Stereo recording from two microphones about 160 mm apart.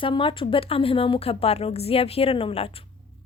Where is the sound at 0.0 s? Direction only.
30° left (ahead or behind).